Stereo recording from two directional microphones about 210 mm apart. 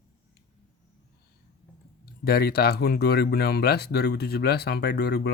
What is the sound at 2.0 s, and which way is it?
Speech, 45° left (ahead or behind).